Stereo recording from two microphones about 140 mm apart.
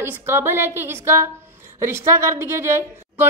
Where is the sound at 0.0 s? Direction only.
15° right (ahead or behind).